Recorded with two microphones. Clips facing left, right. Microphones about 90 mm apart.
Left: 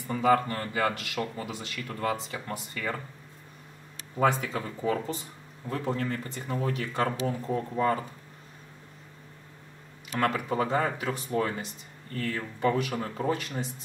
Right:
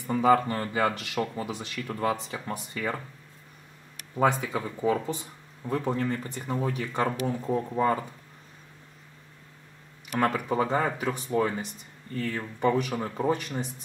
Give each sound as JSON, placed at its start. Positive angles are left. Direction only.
{"t": 0.1, "sound": "speech", "side_deg": -15}
{"t": 4.2, "sound": "speech", "side_deg": -15}
{"t": 6.5, "sound": "speech", "side_deg": -15}
{"t": 6.9, "sound": "speech", "side_deg": -5}
{"t": 10.1, "sound": "speech", "side_deg": -10}
{"t": 11.3, "sound": "speech", "side_deg": -15}